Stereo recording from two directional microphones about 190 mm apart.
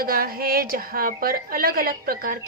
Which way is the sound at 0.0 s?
50° right (ahead or behind).